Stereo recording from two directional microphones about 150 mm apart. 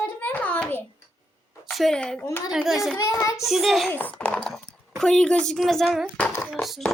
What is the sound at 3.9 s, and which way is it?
A child's voice, 10° left (ahead or behind).